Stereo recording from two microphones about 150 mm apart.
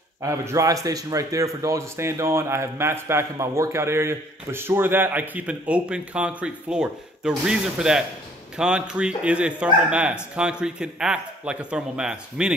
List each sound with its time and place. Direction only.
0.2 s speech: 20° right (ahead or behind); by 12.5 s 5° right (ahead or behind)